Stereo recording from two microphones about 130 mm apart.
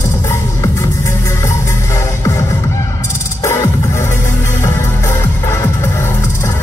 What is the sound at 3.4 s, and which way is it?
Music, 20° left (ahead or behind).